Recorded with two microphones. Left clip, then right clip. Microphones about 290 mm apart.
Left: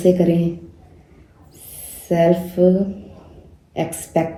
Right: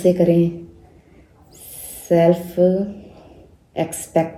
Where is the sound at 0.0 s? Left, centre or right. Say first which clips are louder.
Right 1 dB; right.